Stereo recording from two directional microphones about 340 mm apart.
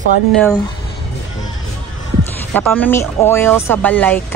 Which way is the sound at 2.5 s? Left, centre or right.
Centre.